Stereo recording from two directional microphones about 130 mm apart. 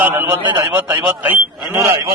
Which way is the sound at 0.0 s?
20° right (ahead or behind).